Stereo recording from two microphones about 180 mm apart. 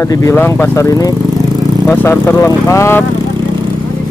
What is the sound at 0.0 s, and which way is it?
Speech, 15° left (ahead or behind).